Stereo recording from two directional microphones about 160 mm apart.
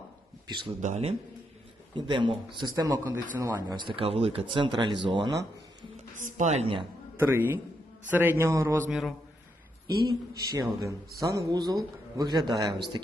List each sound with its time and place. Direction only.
0.4 s speech: 30° right (ahead or behind)
0.8 s speech: 45° right (ahead or behind)
2.0 s a man's voice: 30° right (ahead or behind); by 3.6 s 15° right (ahead or behind)
3.7 s speech: 30° right (ahead or behind)
6.1 s speech: 50° right (ahead or behind)
7.2 s a man's voice: 15° right (ahead or behind)
8.9 s a man's voice: centre (ahead or behind)
10.5 s speech: 20° right (ahead or behind)